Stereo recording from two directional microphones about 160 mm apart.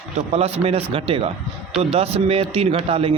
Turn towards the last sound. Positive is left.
turn(degrees=-35)  # may be behind; listen again after turning